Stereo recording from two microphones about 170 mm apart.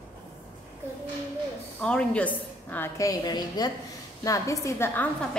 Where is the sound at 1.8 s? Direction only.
5° left (ahead or behind).